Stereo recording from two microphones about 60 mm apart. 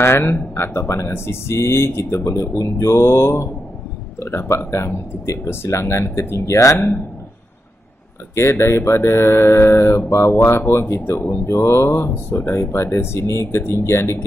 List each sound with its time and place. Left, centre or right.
0.0 s speech: left
8.4 s speech: left
9.8 s speech: left
11.2 s speech: left
11.5 s speech: left